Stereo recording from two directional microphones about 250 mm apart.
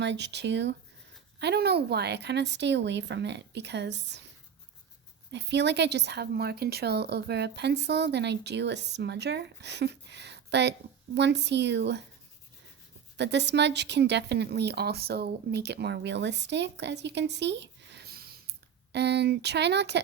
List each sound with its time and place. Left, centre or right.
0.0 s a woman's voice: right
5.3 s a woman's voice: right
13.1 s a woman's voice: right